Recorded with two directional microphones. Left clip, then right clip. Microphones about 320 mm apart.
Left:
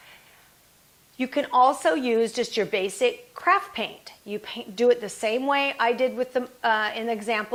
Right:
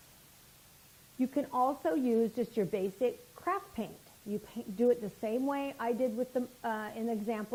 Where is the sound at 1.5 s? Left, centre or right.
Centre.